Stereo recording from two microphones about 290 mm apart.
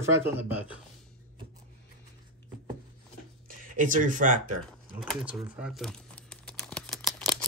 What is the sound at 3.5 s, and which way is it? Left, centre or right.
Speech, right.